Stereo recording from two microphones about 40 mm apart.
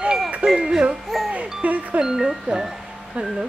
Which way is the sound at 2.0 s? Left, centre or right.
Centre.